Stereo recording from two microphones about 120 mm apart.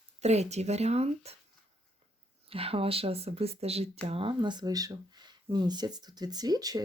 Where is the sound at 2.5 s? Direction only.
55° right (ahead or behind).